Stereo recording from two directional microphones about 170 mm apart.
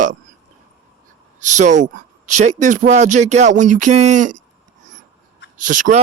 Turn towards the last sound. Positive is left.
turn(degrees=-50)  # may be behind; listen again after turning